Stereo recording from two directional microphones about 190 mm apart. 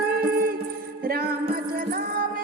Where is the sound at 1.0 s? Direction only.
50° right (ahead or behind).